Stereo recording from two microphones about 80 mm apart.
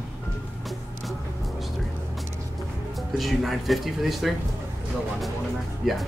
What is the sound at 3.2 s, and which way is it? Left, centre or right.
Speech, centre.